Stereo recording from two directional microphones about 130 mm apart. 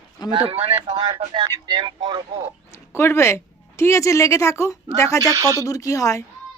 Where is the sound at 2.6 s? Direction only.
20° left (ahead or behind).